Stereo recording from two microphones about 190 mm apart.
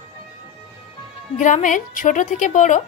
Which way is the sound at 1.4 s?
40° left (ahead or behind).